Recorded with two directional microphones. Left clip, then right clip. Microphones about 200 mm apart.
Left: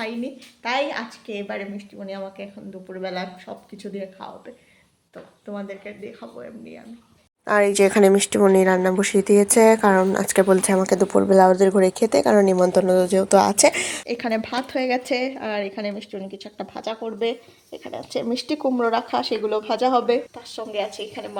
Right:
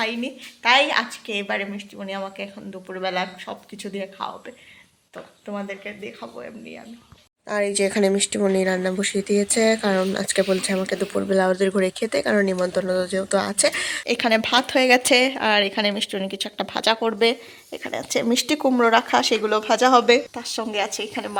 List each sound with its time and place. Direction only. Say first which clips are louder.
0.0 s speech: right 4 dB; centre (ahead or behind)
7.4 s speech: left 5 dB; 15° left (ahead or behind); by 20.2 s centre (ahead or behind)
20.3 s a woman's voice: right 2 dB; 15° right (ahead or behind)